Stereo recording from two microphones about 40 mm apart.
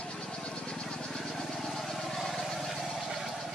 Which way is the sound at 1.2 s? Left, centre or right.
Centre.